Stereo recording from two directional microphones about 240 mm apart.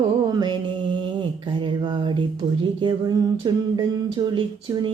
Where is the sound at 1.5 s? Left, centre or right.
Centre.